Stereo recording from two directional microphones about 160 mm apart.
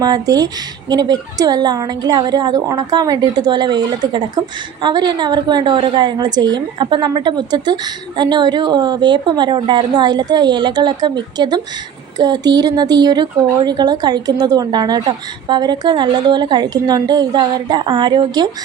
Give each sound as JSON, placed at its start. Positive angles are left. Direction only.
{"t": 0.0, "sound": "speech", "side_deg": -25}